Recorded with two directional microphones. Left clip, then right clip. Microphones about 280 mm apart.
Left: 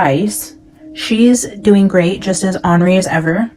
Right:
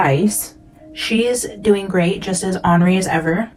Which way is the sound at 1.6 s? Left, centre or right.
Left.